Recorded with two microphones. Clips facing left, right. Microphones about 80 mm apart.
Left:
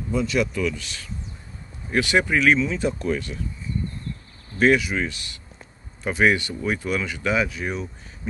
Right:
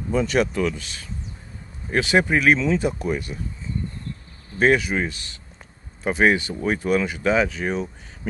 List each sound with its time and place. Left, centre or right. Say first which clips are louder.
0.1 s speech: right 2 dB; right; by 3.3 s centre
4.6 s speech: even; right